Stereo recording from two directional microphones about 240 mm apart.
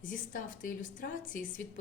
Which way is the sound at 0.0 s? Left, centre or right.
Left.